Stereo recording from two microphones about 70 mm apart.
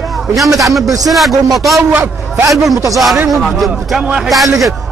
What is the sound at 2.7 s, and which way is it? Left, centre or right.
Speech, right.